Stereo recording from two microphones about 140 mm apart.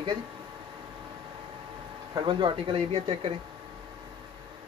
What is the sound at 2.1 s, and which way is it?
Speech, 35° right (ahead or behind).